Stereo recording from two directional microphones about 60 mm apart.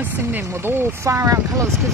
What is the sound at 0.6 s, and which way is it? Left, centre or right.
Speech, right.